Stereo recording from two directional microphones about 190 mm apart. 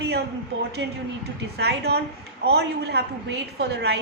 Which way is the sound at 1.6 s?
60° right (ahead or behind).